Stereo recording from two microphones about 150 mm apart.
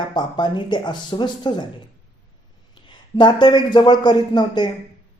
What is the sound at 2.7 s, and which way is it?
A man's voice, 30° left (ahead or behind).